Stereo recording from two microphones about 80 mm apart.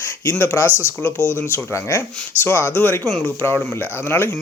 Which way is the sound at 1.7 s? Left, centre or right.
Left.